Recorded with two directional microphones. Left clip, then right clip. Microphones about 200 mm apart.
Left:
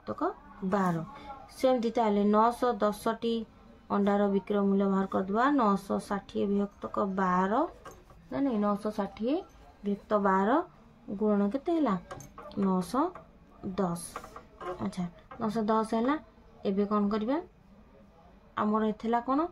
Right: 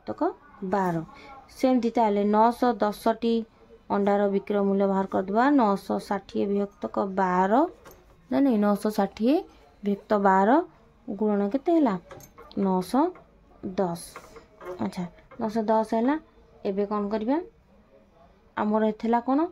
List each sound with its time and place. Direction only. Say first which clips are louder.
0.0 s a woman's voice: right 4 dB; 35° right (ahead or behind)
8.3 s a woman's voice: right 7 dB; 50° right (ahead or behind)
14.8 s a woman's voice: right 5 dB; 40° right (ahead or behind)
18.5 s a woman's voice: right 4 dB; 35° right (ahead or behind)